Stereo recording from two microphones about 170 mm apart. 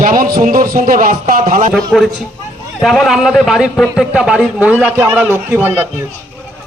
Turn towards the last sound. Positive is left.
turn(degrees=-10)  # may be behind; listen again after turning